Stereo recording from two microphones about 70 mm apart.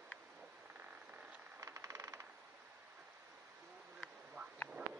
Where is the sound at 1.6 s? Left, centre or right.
Right.